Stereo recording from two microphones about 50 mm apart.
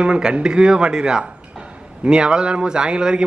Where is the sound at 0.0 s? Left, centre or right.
Centre.